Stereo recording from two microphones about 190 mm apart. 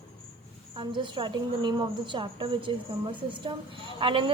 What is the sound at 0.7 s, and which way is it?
A woman's voice, 25° right (ahead or behind).